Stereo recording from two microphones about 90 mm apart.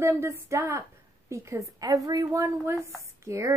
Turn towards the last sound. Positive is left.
turn(degrees=-35)  # may be behind; listen again after turning